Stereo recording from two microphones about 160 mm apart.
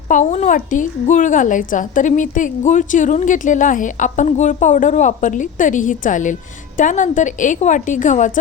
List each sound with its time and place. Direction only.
0.1 s a woman's voice: 50° left (ahead or behind)